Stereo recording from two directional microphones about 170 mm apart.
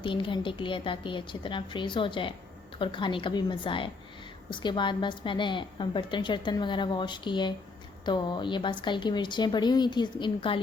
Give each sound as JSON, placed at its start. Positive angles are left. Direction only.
{"t": 0.0, "sound": "a woman's voice", "side_deg": 30}